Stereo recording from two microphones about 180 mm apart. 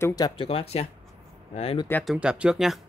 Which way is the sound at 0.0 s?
20° left (ahead or behind).